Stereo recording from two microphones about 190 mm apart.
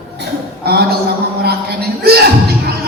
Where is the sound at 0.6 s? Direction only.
55° right (ahead or behind).